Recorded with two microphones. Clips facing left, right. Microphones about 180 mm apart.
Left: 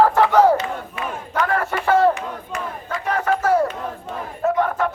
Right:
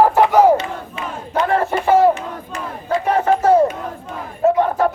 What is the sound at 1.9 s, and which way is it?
Crowd, 15° right (ahead or behind).